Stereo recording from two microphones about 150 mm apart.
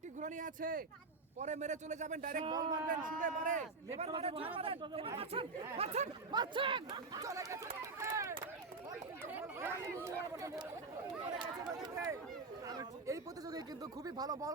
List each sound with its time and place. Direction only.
0.2 s a man's voice: 55° right (ahead or behind)
1.4 s a man's voice: 50° right (ahead or behind)
2.4 s speech: 30° right (ahead or behind)
2.9 s a man's voice: 60° right (ahead or behind); by 6.1 s 45° right (ahead or behind)
6.3 s speech: 30° right (ahead or behind)
11.8 s a sound: 20° right (ahead or behind)
12.6 s speech: 25° right (ahead or behind)